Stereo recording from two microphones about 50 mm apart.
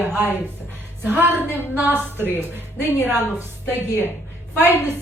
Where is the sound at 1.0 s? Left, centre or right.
Right.